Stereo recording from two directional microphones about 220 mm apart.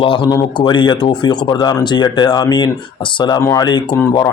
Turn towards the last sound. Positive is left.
turn(degrees=20)  # may be behind; listen again after turning